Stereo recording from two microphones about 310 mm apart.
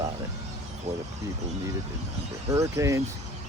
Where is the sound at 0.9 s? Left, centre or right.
Centre.